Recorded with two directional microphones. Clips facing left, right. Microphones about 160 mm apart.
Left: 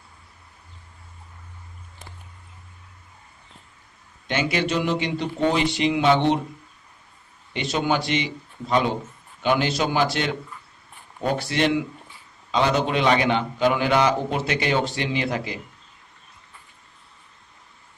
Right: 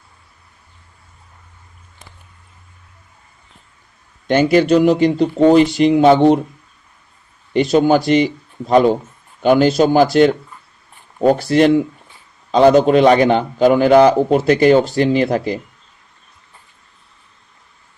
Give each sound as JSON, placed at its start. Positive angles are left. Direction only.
{"t": 4.3, "sound": "a man's voice", "side_deg": -45}
{"t": 7.5, "sound": "a man's voice", "side_deg": -45}